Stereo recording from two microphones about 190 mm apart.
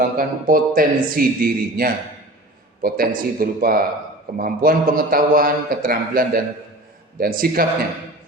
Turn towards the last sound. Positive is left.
turn(degrees=-50)  # may be behind; listen again after turning